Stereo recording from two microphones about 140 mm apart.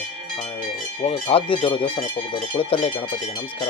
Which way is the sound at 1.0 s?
40° left (ahead or behind).